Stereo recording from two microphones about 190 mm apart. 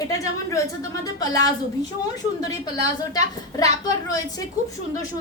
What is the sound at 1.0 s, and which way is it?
Speech, 20° left (ahead or behind).